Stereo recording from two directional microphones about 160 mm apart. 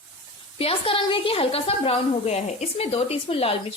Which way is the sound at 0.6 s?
35° left (ahead or behind).